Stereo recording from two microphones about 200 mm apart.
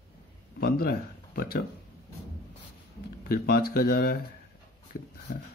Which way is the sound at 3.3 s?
50° left (ahead or behind).